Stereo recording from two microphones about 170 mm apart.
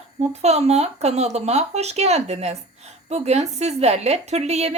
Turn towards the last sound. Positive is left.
turn(degrees=-40)  # may be behind; listen again after turning